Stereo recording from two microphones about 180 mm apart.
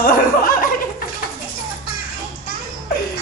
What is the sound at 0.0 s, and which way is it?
Chuckle, 50° left (ahead or behind).